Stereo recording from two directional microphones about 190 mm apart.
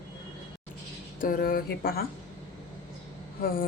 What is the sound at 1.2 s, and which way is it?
Speech, 50° left (ahead or behind).